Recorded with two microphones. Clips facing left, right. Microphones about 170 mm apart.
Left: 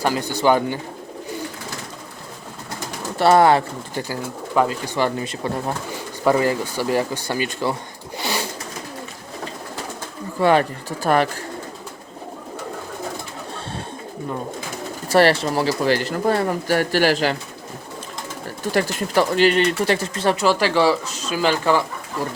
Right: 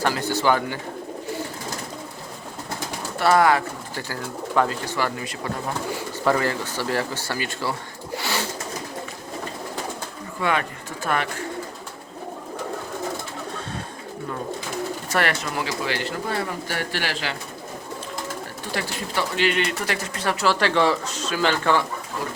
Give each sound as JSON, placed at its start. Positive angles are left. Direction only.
{"t": 0.0, "sound": "speech", "side_deg": 15}
{"t": 3.2, "sound": "speech", "side_deg": 30}
{"t": 4.1, "sound": "speech", "side_deg": 15}
{"t": 6.2, "sound": "speech", "side_deg": 15}
{"t": 10.4, "sound": "speech", "side_deg": 35}
{"t": 15.1, "sound": "speech", "side_deg": 30}
{"t": 18.7, "sound": "speech", "side_deg": 45}
{"t": 20.3, "sound": "speech", "side_deg": 15}